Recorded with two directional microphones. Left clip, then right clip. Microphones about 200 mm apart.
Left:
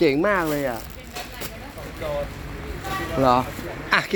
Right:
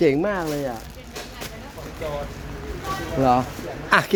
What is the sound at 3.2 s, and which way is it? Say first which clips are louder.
Speech: even; 25° right (ahead or behind).